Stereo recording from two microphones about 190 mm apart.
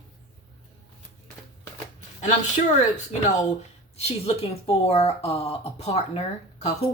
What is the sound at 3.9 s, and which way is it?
Speech, 30° left (ahead or behind).